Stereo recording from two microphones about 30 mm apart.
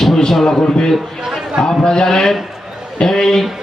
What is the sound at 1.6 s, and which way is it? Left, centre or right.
A man's voice, left.